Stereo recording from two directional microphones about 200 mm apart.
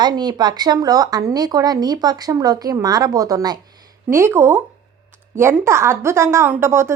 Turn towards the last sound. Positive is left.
turn(degrees=-15)  # may be behind; listen again after turning